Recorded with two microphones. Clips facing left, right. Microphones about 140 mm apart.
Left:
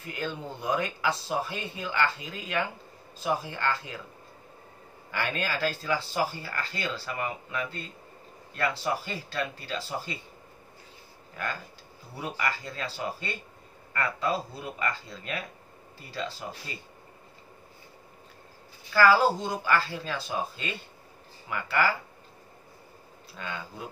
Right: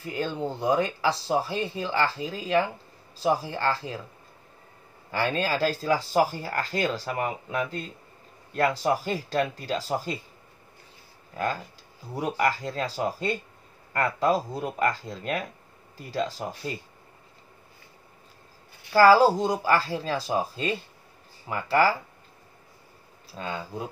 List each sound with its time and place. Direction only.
0.0 s speech: 30° right (ahead or behind)
5.1 s speech: 35° right (ahead or behind)
12.2 s speech: 40° right (ahead or behind)
18.9 s speech: 35° right (ahead or behind)
23.3 s speech: 30° right (ahead or behind)